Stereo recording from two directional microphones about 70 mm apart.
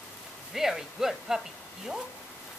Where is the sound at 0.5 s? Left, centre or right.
Centre.